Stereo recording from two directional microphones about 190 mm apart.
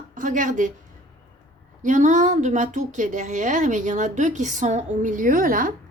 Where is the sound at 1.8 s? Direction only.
40° right (ahead or behind).